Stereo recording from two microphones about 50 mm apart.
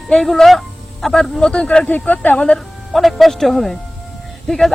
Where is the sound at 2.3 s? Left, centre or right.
Centre.